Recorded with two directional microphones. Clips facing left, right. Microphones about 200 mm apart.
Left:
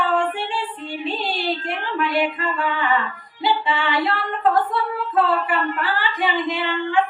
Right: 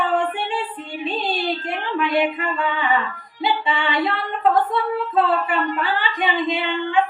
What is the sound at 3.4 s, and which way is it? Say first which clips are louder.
Music: left 1 dB; 20° right (ahead or behind).